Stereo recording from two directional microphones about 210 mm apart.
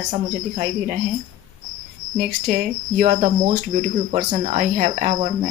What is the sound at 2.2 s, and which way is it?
Cricket, 40° right (ahead or behind).